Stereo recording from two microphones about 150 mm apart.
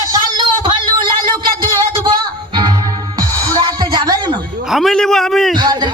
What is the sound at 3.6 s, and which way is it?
Music, 30° right (ahead or behind).